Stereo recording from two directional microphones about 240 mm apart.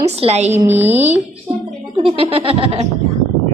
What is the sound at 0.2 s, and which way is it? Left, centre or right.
Speech, right.